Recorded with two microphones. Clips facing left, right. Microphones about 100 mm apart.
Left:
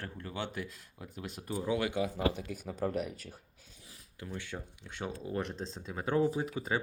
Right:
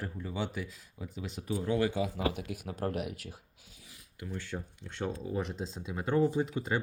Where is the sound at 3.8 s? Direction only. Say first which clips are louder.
Even; 30° left (ahead or behind).